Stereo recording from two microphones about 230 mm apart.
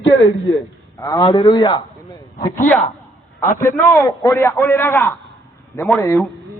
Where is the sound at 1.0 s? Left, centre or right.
Centre.